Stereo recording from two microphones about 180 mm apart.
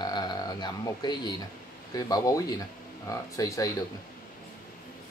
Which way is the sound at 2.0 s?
20° left (ahead or behind).